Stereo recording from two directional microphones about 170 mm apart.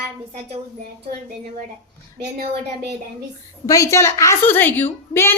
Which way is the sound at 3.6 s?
20° left (ahead or behind).